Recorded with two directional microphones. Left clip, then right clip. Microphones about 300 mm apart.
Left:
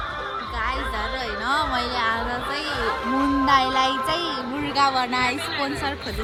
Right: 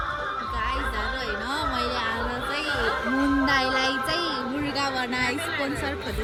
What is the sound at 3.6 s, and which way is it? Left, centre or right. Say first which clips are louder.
Child singing: left 3 dB; right.